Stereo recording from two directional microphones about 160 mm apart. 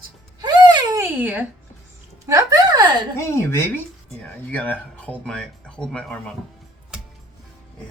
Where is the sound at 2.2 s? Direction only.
20° right (ahead or behind).